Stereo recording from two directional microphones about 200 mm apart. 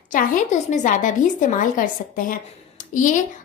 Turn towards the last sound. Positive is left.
turn(degrees=40)  # may be behind; listen again after turning